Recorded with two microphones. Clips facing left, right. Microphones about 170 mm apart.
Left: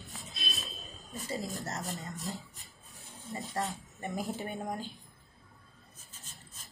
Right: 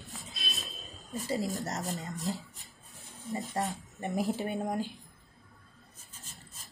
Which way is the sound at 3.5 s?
20° right (ahead or behind).